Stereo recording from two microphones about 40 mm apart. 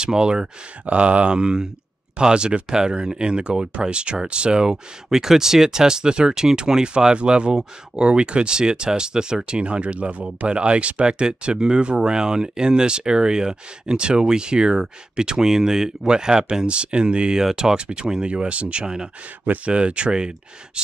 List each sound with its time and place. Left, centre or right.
0.0 s speech: right
5.1 s speech: centre
17.4 s speech: centre
19.4 s speech: right
19.7 s speech: right